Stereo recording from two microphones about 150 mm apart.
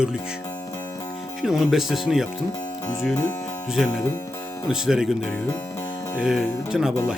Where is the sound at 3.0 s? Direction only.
10° left (ahead or behind).